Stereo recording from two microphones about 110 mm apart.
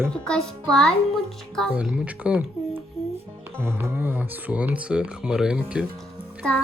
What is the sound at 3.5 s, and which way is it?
Speech, 20° right (ahead or behind).